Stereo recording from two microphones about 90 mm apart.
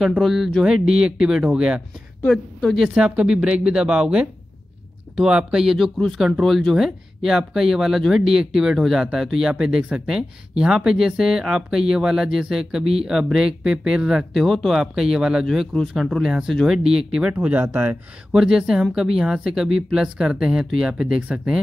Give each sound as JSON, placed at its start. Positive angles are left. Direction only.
{"t": 0.0, "sound": "speech", "side_deg": -5}
{"t": 2.2, "sound": "speech", "side_deg": 5}
{"t": 2.9, "sound": "speech", "side_deg": -10}
{"t": 18.3, "sound": "speech", "side_deg": -5}